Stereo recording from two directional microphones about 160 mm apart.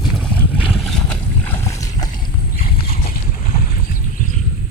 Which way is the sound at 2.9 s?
50° left (ahead or behind).